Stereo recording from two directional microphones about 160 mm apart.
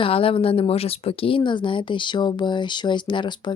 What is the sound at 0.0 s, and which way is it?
Speech, 35° left (ahead or behind).